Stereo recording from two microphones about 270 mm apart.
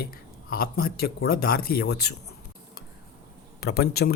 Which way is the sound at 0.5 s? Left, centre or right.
Left.